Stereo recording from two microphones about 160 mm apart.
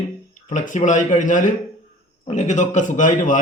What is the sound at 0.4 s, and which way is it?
A man's voice, 50° left (ahead or behind).